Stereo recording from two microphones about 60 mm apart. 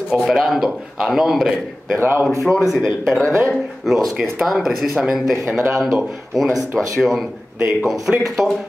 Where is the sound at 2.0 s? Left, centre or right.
Right.